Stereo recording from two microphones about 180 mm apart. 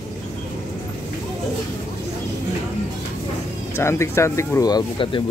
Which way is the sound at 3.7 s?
15° left (ahead or behind).